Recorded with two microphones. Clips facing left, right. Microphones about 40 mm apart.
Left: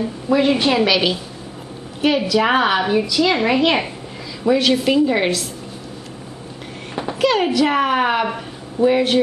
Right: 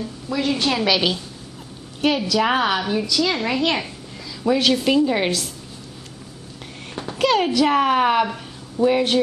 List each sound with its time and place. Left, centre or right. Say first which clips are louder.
0.0 s a woman's voice: left 7 dB; left
0.8 s a woman's voice: left 2 dB; centre; by 3.9 s left
4.5 s a woman's voice: left 2 dB; centre
7.2 s a woman's voice: left 1 dB; centre